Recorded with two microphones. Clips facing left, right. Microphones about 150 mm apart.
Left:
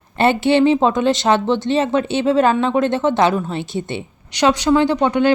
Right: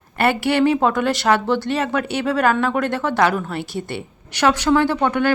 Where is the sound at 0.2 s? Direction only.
25° left (ahead or behind).